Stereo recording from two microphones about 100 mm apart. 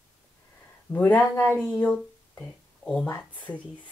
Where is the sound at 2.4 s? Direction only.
5° left (ahead or behind).